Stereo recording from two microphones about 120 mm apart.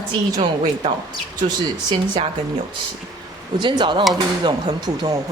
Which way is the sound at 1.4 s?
35° right (ahead or behind).